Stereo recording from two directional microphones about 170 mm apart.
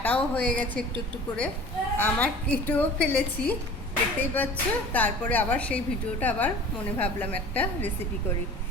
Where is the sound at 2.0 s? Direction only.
10° left (ahead or behind).